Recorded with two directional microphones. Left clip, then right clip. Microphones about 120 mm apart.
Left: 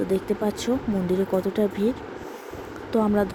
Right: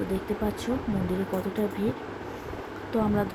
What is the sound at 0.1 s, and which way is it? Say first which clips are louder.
Speech: left 5 dB; 75° left (ahead or behind).